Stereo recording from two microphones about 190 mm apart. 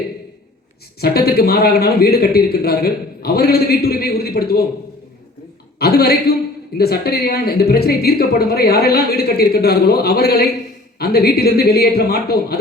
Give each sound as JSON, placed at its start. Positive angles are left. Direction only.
{"t": 0.9, "sound": "a man's voice", "side_deg": 55}
{"t": 5.8, "sound": "a man's voice", "side_deg": 55}